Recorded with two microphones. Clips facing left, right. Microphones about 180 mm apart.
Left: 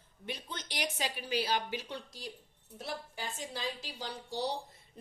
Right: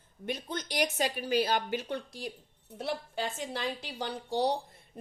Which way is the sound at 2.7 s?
65° right (ahead or behind).